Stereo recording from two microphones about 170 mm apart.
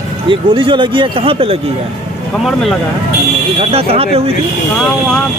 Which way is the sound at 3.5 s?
35° right (ahead or behind).